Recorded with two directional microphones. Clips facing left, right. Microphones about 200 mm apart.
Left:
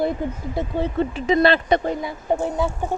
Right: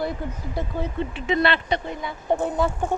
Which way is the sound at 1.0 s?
40° left (ahead or behind).